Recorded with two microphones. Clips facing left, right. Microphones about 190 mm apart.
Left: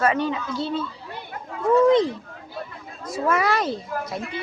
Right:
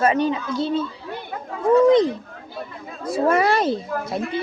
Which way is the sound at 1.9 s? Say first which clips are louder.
Right 2 dB; 20° right (ahead or behind).